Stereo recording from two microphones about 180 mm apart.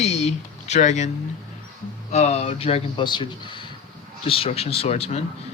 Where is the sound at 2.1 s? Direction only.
40° left (ahead or behind).